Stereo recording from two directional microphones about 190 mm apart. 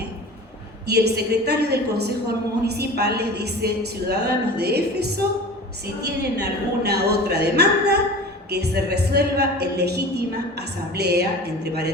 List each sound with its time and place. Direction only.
0.9 s a woman's voice: 60° right (ahead or behind)